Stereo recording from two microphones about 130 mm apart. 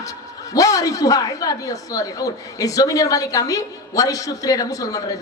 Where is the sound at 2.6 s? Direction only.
25° left (ahead or behind).